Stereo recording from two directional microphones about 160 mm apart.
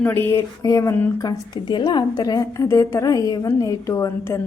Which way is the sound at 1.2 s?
25° left (ahead or behind).